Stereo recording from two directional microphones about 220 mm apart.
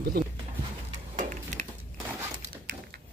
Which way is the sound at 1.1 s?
35° right (ahead or behind).